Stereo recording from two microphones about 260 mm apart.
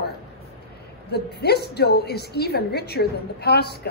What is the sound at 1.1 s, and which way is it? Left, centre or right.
A woman's voice, left.